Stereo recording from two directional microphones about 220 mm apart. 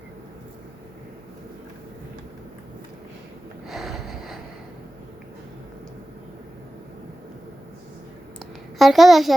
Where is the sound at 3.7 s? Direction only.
Centre (ahead or behind).